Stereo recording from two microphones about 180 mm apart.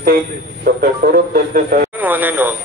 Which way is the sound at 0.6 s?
55° right (ahead or behind).